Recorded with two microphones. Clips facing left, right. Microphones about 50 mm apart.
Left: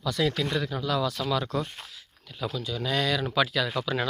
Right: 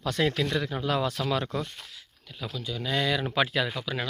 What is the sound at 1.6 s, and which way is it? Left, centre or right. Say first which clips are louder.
Speech: left 1 dB; centre.